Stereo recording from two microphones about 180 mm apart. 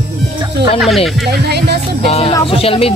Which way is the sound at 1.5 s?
65° right (ahead or behind).